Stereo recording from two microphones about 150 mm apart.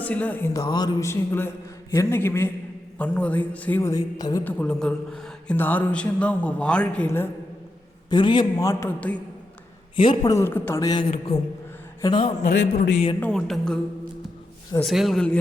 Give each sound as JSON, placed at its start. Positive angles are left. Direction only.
{"t": 0.0, "sound": "a man's voice", "side_deg": 10}
{"t": 4.4, "sound": "a man's voice", "side_deg": 10}
{"t": 8.1, "sound": "a man's voice", "side_deg": 30}
{"t": 9.9, "sound": "a man's voice", "side_deg": 35}
{"t": 10.3, "sound": "a man's voice", "side_deg": 15}
{"t": 11.1, "sound": "a man's voice", "side_deg": 40}
{"t": 12.5, "sound": "a man's voice", "side_deg": 60}
{"t": 13.1, "sound": "music", "side_deg": 5}
{"t": 14.8, "sound": "music", "side_deg": 0}